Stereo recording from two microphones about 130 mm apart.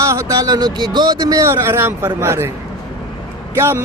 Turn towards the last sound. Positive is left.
turn(degrees=-20)  # may be behind; listen again after turning